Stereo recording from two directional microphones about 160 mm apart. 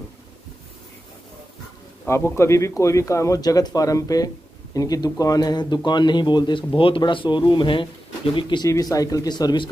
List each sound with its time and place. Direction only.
2.0 s a man's voice: 15° left (ahead or behind)